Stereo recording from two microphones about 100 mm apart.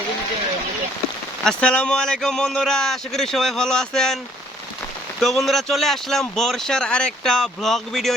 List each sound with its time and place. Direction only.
1.5 s speech: 10° left (ahead or behind)
5.2 s speech: centre (ahead or behind)